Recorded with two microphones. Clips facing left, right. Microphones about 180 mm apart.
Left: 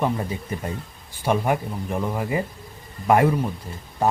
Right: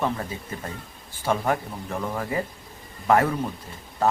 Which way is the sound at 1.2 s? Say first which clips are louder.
Left 2 dB; 15° left (ahead or behind).